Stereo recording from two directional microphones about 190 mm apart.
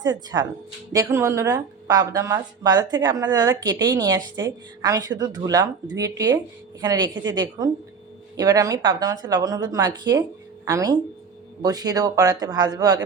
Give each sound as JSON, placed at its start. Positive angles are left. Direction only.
{"t": 0.0, "sound": "speech", "side_deg": -20}